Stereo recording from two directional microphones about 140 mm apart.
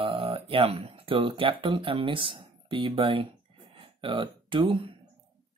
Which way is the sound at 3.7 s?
40° right (ahead or behind).